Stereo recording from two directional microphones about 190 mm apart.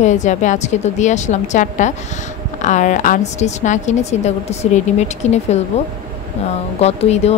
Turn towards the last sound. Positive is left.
turn(degrees=35)  # may be behind; listen again after turning